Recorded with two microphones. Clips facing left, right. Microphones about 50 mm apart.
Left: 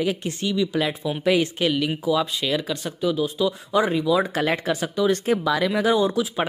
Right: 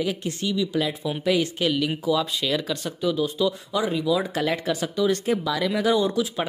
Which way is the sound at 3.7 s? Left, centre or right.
Left.